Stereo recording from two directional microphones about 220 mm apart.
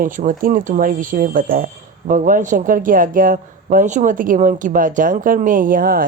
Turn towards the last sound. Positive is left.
turn(degrees=-40)  # may be behind; listen again after turning